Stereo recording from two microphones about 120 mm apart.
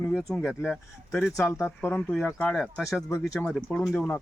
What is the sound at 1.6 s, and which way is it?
Speech, 20° left (ahead or behind).